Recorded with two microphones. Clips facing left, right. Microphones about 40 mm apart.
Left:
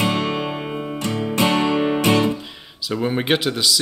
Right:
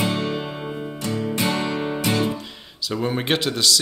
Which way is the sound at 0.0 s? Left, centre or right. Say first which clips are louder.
Left 3 dB; left.